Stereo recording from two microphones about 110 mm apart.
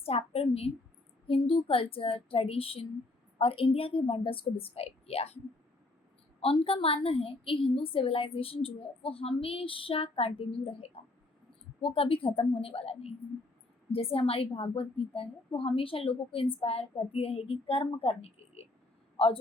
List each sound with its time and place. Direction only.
0.0 s a sound: 65° left (ahead or behind)
1.3 s a woman's voice: 55° left (ahead or behind)
6.4 s a woman's voice: 60° left (ahead or behind)